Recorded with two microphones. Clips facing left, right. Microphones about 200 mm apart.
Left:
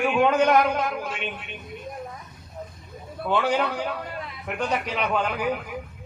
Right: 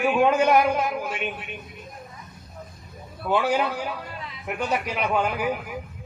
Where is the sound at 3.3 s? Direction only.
10° right (ahead or behind).